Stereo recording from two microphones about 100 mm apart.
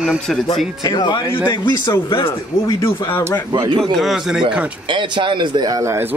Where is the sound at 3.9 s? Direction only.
Centre (ahead or behind).